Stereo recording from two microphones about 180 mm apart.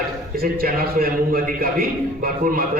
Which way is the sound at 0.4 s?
55° right (ahead or behind).